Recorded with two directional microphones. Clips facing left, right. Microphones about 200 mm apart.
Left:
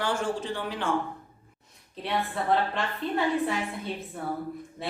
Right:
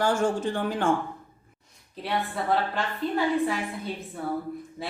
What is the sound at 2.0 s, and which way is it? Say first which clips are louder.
A woman's voice: even; centre (ahead or behind).